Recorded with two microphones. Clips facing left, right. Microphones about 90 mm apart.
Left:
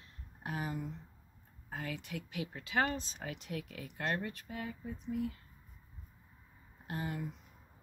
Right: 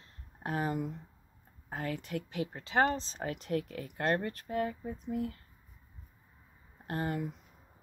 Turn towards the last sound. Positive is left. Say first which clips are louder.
# right 5 dB
turn(degrees=-50)  # may be behind; listen again after turning